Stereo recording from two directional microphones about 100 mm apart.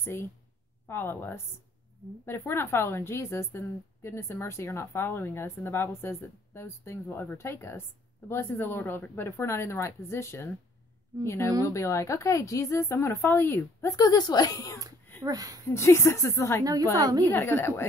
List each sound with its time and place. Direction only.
0.0 s a woman's voice: 25° left (ahead or behind)
13.9 s speech: 40° left (ahead or behind)
15.2 s speech: 35° right (ahead or behind)
15.7 s a woman's voice: 30° left (ahead or behind)
16.9 s speech: 40° right (ahead or behind)
17.3 s a woman's voice: 25° left (ahead or behind)